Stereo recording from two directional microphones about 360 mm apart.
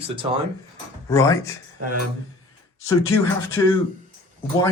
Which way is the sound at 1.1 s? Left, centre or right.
Centre.